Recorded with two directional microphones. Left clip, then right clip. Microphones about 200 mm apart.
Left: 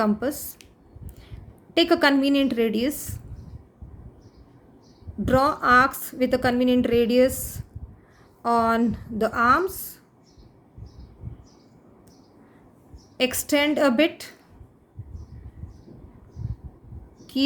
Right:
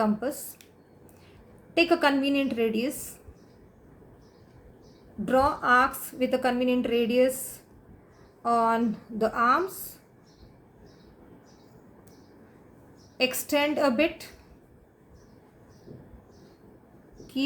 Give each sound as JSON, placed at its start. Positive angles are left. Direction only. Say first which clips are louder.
{"t": 0.0, "sound": "a woman's voice", "louder": "left 3 dB", "side_deg": 45}
{"t": 1.7, "sound": "a woman's voice", "louder": "left 3 dB", "side_deg": 45}
{"t": 5.2, "sound": "a woman's voice", "louder": "left 3 dB", "side_deg": 45}
{"t": 8.4, "sound": "a woman's voice", "louder": "left 3 dB", "side_deg": 45}
{"t": 13.1, "sound": "a woman's voice", "louder": "left 3 dB", "side_deg": 45}